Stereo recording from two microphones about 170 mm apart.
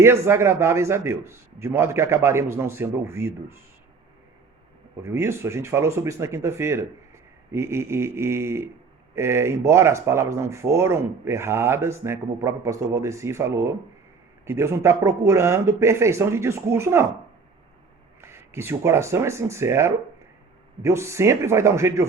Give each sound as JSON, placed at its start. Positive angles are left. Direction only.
{"t": 0.0, "sound": "speech", "side_deg": -15}
{"t": 5.0, "sound": "speech", "side_deg": -15}
{"t": 18.2, "sound": "speech", "side_deg": -15}